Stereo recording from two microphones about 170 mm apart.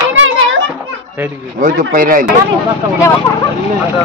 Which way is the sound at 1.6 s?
55° right (ahead or behind).